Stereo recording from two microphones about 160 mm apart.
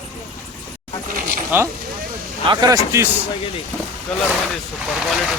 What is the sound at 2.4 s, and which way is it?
Speech, 25° right (ahead or behind).